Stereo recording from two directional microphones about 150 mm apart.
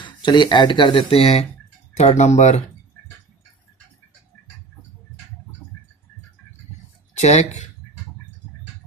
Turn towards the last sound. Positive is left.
turn(degrees=50)  # may be behind; listen again after turning